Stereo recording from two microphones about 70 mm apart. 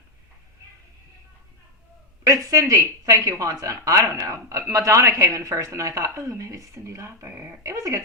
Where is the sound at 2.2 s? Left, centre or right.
Right.